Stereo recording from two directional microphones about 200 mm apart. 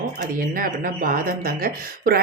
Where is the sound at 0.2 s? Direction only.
45° right (ahead or behind).